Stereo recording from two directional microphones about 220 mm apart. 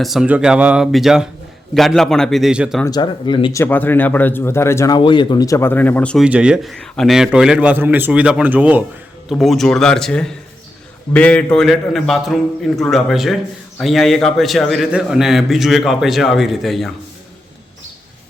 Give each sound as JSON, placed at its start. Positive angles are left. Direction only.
{"t": 0.0, "sound": "a man's voice", "side_deg": 0}
{"t": 2.8, "sound": "speech", "side_deg": 20}
{"t": 3.6, "sound": "a man's voice", "side_deg": 10}